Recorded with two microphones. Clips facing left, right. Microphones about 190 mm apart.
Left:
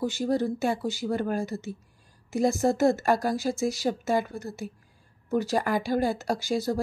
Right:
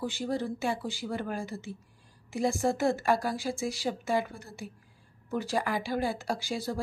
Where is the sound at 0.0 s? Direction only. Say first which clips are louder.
Left 6 dB; 40° left (ahead or behind).